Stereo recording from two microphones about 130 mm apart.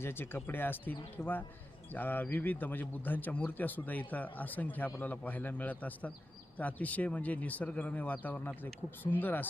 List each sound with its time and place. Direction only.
0.0 s speech: 15° left (ahead or behind)